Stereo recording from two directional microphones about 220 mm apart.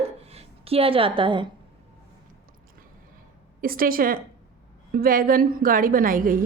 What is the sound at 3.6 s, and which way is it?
A woman's voice, 40° right (ahead or behind).